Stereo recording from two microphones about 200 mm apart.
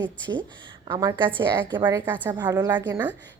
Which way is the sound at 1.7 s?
10° right (ahead or behind).